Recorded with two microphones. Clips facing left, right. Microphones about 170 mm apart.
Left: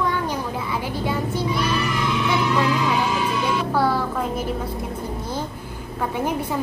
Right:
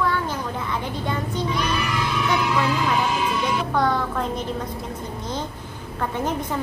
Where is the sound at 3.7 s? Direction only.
5° left (ahead or behind).